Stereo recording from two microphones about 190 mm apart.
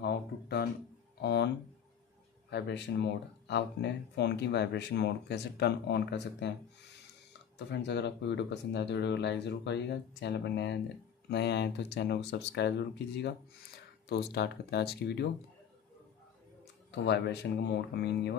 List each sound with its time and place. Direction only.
0.0 s a sound: 60° left (ahead or behind)
2.5 s speech: 65° left (ahead or behind)
7.5 s speech: 65° left (ahead or behind)
16.9 s speech: 65° left (ahead or behind)